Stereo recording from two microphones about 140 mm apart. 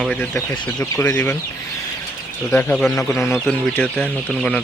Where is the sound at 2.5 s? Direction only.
5° left (ahead or behind).